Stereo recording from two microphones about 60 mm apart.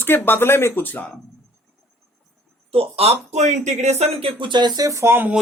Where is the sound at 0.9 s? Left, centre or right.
Left.